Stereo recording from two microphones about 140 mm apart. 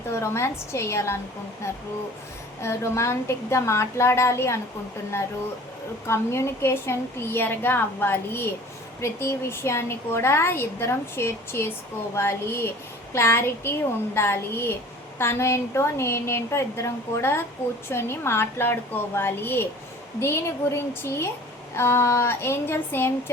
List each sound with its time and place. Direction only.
0.1 s a woman's voice: 20° left (ahead or behind)
6.1 s a woman's voice: 20° left (ahead or behind)